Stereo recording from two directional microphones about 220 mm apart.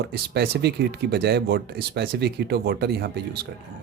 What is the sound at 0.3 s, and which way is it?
Speech, 50° right (ahead or behind).